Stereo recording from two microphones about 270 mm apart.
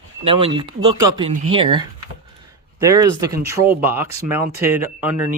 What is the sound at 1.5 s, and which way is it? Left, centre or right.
Speech, centre.